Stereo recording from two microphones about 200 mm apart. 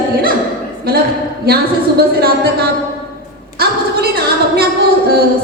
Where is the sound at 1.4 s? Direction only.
50° right (ahead or behind).